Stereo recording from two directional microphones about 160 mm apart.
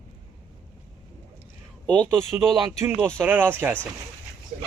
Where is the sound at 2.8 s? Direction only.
15° right (ahead or behind).